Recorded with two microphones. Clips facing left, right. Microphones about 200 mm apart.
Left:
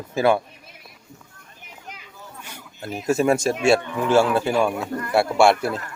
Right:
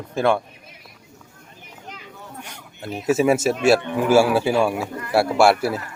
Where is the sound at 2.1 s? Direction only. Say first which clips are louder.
Right 3 dB; 70° right (ahead or behind).